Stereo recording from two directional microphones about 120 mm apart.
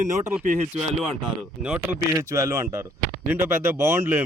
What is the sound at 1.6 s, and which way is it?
Speech, 10° right (ahead or behind).